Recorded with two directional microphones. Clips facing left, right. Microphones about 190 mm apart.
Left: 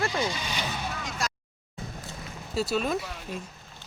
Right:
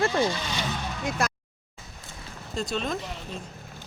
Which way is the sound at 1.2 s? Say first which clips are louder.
Right 5 dB; 55° right (ahead or behind).